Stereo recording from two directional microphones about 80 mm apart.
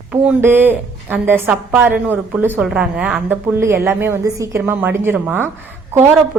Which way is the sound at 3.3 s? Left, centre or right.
Right.